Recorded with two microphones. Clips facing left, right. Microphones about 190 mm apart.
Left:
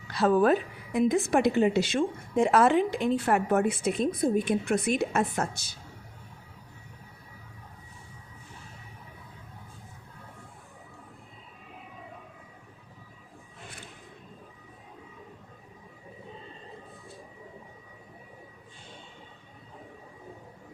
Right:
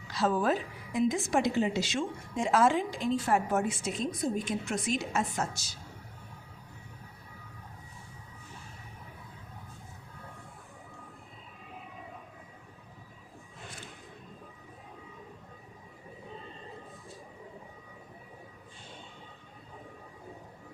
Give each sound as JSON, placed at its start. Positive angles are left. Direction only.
{"t": 0.1, "sound": "a woman's voice", "side_deg": 60}